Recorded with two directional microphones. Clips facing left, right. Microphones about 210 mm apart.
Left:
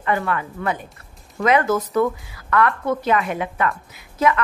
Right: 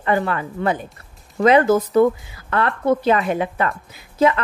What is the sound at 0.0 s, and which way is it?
A woman's voice, 35° right (ahead or behind).